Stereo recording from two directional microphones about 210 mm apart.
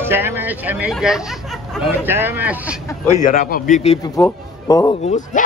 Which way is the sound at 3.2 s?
45° left (ahead or behind).